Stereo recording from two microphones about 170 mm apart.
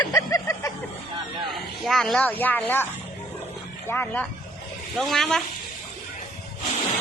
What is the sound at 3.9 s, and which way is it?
Speech, 10° left (ahead or behind).